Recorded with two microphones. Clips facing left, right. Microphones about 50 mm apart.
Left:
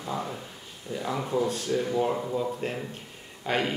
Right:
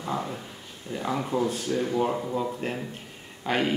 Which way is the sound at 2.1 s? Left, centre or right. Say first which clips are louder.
Even; centre.